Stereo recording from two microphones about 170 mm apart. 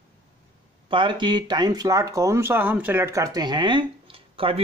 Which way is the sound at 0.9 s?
30° right (ahead or behind).